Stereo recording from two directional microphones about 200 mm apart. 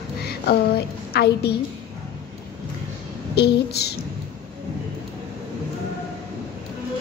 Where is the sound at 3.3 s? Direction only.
55° left (ahead or behind).